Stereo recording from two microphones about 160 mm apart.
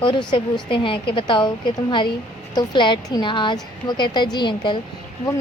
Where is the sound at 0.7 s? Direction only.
30° left (ahead or behind).